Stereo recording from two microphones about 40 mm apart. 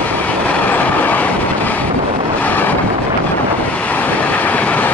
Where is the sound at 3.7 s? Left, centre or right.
Left.